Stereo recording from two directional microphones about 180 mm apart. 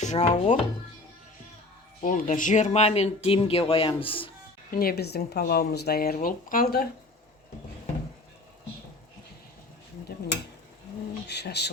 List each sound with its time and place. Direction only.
0.0 s speech: 40° left (ahead or behind)
2.0 s speech: 45° left (ahead or behind); by 4.3 s 30° left (ahead or behind)
4.7 s speech: 55° left (ahead or behind)
10.1 s a sound: 55° left (ahead or behind)
11.3 s speech: 70° left (ahead or behind)